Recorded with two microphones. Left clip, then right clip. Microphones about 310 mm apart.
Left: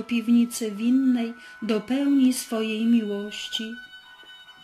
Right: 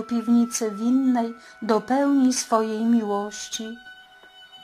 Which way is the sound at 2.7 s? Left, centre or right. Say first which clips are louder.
Even; right.